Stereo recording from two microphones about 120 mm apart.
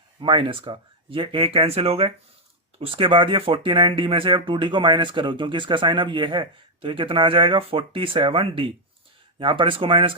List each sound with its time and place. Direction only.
0.2 s speech: 45° right (ahead or behind)